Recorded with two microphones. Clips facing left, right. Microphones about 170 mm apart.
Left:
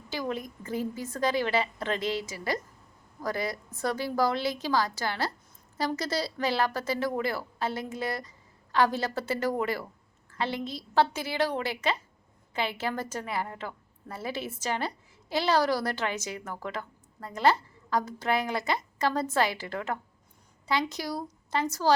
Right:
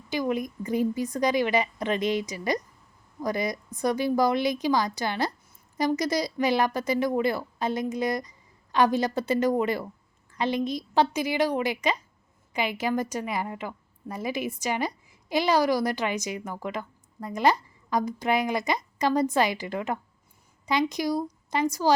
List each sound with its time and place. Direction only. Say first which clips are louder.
0.1 s a woman's voice: right 6 dB; 15° right (ahead or behind)